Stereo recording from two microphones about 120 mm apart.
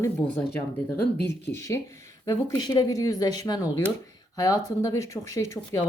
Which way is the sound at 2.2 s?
25° left (ahead or behind).